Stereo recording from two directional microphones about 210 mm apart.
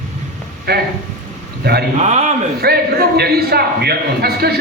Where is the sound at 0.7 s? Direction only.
50° right (ahead or behind).